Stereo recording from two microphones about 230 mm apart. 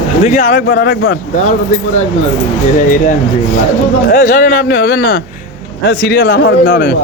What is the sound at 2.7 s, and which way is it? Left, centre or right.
Speech, left.